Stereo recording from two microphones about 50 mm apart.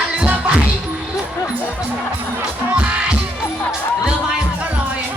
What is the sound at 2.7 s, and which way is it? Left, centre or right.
Music, right.